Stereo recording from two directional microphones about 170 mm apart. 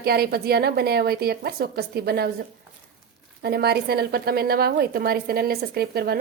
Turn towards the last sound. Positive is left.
turn(degrees=-65)  # may be behind; listen again after turning